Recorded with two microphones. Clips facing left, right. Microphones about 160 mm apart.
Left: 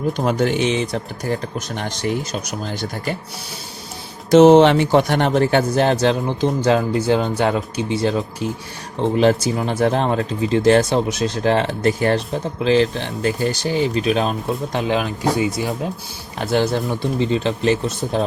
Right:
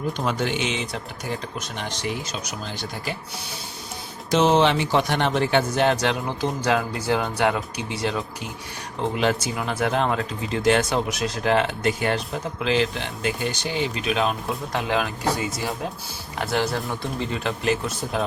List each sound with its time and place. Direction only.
0.3 s speech: 45° left (ahead or behind)
4.3 s speech: 55° left (ahead or behind); by 14.3 s 35° left (ahead or behind)
14.7 s speech: 20° left (ahead or behind)